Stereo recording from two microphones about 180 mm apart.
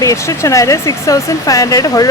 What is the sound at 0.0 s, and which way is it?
Speech, 20° left (ahead or behind).